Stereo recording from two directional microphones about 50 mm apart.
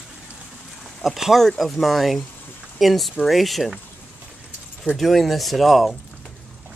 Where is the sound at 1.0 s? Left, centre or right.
Centre.